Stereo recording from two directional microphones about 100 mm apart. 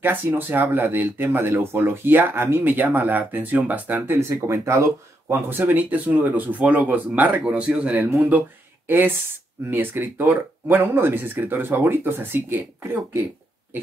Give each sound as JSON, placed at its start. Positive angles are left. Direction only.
{"t": 0.0, "sound": "speech", "side_deg": -20}
{"t": 4.2, "sound": "speech", "side_deg": -30}